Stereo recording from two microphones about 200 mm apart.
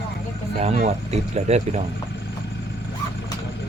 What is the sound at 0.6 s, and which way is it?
Speech, 35° right (ahead or behind).